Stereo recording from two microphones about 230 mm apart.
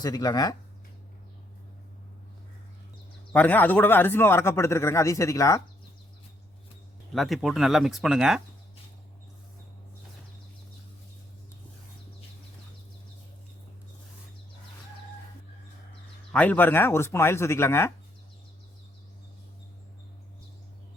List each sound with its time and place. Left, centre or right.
0.0 s a man's voice: centre
3.3 s a man's voice: centre
7.1 s speech: centre
16.3 s a man's voice: centre